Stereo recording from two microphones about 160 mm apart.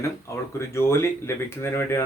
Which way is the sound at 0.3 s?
15° left (ahead or behind).